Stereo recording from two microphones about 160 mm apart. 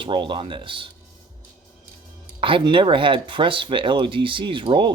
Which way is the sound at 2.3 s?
35° right (ahead or behind).